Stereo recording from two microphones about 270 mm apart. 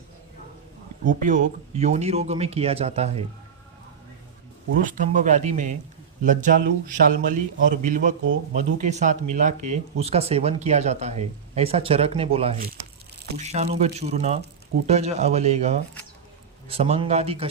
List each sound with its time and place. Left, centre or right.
1.2 s speech: right
4.8 s speech: right